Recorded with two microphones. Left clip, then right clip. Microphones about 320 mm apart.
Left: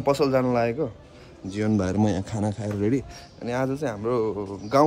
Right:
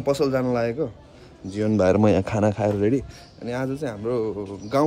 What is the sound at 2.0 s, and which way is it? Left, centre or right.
Speech, centre.